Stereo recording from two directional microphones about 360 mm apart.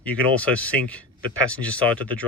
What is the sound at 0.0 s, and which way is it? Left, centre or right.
Speech, centre.